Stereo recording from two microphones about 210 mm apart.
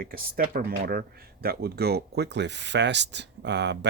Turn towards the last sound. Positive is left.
turn(degrees=-55)  # may be behind; listen again after turning